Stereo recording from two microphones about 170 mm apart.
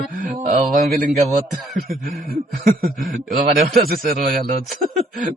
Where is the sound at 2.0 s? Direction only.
60° right (ahead or behind).